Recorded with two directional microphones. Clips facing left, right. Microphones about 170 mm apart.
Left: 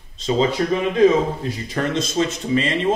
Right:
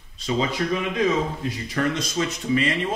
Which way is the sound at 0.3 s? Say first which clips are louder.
Left 5 dB; 30° left (ahead or behind).